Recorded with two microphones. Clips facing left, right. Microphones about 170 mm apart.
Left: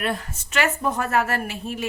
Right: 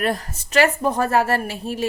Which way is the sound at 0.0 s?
40° right (ahead or behind).